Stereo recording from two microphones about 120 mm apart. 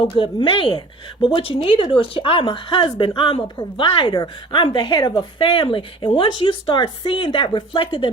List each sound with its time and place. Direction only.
0.0 s a woman's voice: 45° left (ahead or behind)